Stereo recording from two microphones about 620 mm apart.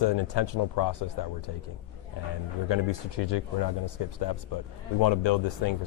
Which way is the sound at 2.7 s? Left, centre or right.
Left.